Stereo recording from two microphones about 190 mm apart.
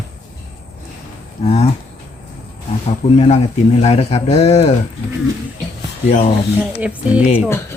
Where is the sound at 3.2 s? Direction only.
35° left (ahead or behind).